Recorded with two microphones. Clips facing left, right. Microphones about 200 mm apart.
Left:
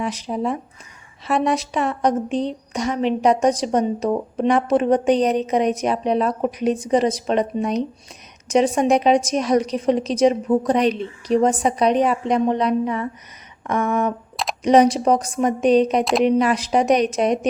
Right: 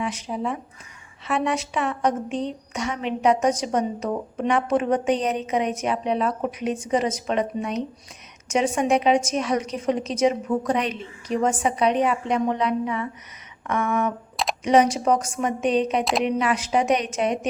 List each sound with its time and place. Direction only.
0.0 s a woman's voice: 35° left (ahead or behind)